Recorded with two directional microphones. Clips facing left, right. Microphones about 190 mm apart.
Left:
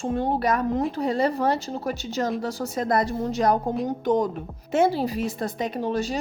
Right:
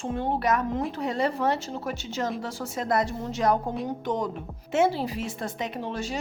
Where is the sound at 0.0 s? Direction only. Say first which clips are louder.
Left 3 dB; 40° left (ahead or behind).